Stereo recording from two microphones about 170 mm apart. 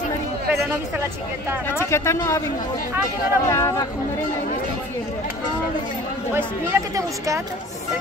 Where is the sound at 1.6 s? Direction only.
15° left (ahead or behind).